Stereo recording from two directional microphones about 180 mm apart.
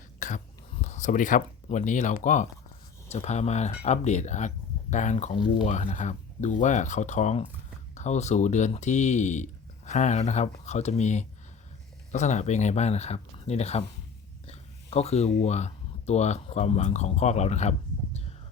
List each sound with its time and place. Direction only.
0.2 s speech: 45° left (ahead or behind)